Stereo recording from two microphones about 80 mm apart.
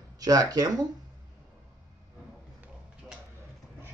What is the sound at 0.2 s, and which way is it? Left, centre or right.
Speech, right.